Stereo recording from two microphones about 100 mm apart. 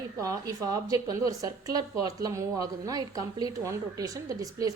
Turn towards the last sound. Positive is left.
turn(degrees=-35)  # may be behind; listen again after turning